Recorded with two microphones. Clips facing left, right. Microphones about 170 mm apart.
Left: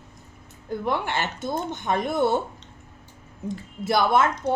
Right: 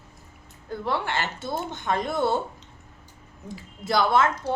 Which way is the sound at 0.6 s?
20° left (ahead or behind).